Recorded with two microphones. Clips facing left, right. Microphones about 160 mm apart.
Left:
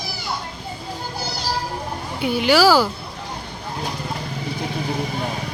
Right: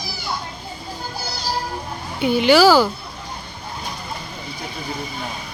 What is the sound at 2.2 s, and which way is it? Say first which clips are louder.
Speech: right 3 dB; 5° left (ahead or behind).